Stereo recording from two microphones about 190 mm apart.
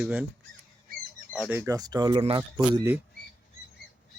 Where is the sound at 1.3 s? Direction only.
10° right (ahead or behind); by 2.4 s 30° right (ahead or behind).